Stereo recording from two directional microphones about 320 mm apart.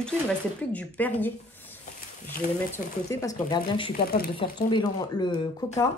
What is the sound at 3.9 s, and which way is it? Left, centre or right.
Speech, left.